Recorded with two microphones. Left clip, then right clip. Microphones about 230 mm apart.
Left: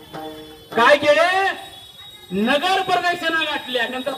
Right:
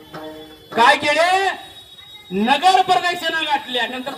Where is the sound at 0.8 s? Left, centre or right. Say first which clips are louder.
Even; right.